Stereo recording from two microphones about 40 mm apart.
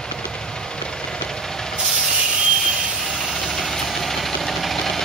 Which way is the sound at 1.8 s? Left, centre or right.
Centre.